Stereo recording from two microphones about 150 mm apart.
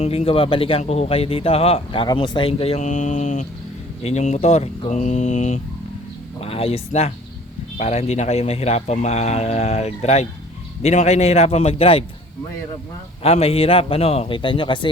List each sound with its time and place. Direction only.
0.0 s a man's voice: 45° left (ahead or behind)
6.4 s a man's voice: 40° left (ahead or behind)
13.2 s a man's voice: 40° left (ahead or behind)